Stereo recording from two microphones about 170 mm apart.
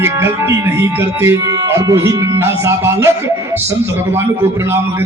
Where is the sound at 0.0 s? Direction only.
15° right (ahead or behind).